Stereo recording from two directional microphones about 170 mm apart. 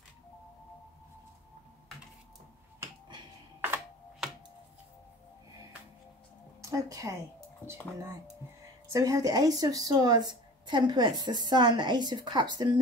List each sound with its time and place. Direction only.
6.6 s a woman's voice: 20° right (ahead or behind)
8.9 s a woman's voice: 20° right (ahead or behind)